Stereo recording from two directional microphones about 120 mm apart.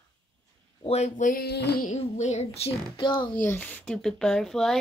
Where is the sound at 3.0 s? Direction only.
40° left (ahead or behind).